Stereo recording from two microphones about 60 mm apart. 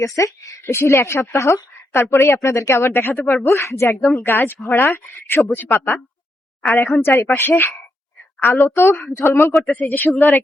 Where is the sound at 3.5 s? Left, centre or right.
Left.